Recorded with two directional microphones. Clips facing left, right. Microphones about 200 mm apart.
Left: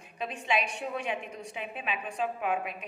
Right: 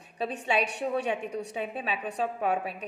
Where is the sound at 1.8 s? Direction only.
40° right (ahead or behind).